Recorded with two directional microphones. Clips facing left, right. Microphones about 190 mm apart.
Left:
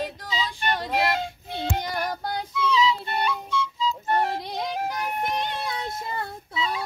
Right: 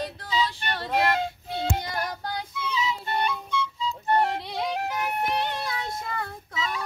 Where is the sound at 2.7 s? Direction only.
55° right (ahead or behind).